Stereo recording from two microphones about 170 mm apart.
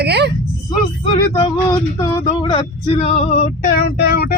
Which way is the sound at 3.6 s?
65° left (ahead or behind).